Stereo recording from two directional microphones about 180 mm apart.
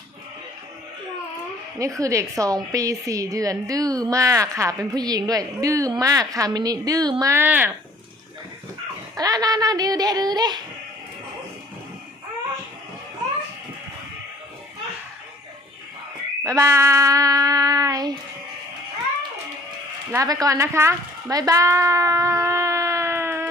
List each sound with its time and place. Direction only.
1.8 s a woman's voice: 15° right (ahead or behind)
9.1 s a woman's voice: 20° right (ahead or behind)
16.4 s a woman's voice: 15° right (ahead or behind)
20.1 s speech: 20° right (ahead or behind)